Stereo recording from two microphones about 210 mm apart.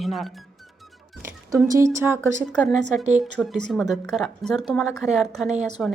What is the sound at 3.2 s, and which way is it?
Speech, centre (ahead or behind).